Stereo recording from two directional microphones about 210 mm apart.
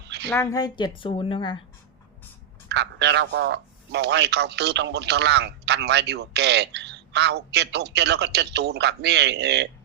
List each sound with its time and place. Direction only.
0.3 s a woman's voice: 15° left (ahead or behind)
2.6 s a man's voice: 55° right (ahead or behind)